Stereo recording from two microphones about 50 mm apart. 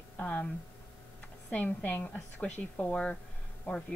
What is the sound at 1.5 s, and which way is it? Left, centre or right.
Speech, left.